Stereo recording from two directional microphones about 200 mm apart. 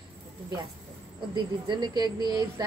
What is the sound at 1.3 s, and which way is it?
Speech, 20° right (ahead or behind).